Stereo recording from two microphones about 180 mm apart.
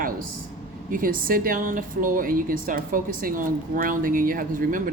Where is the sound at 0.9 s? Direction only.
50° right (ahead or behind).